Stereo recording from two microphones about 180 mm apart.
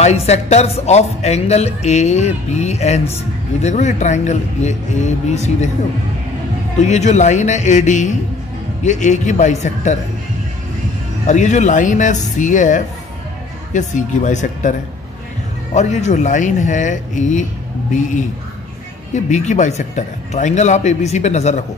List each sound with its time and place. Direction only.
0.0 s speech: 35° left (ahead or behind)
6.8 s speech: 40° left (ahead or behind)
11.2 s speech: 40° left (ahead or behind)
19.1 s speech: 40° left (ahead or behind)